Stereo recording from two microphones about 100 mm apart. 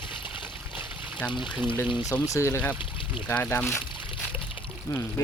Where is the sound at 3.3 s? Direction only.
20° left (ahead or behind).